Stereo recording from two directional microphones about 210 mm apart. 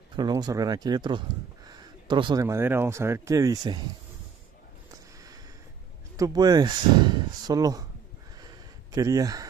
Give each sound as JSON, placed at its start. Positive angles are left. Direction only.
{"t": 0.1, "sound": "speech", "side_deg": -20}
{"t": 6.1, "sound": "speech", "side_deg": -15}
{"t": 8.4, "sound": "a sound", "side_deg": -15}